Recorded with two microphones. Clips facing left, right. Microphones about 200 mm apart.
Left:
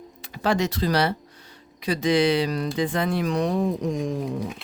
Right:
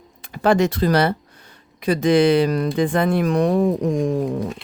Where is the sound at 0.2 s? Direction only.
50° right (ahead or behind).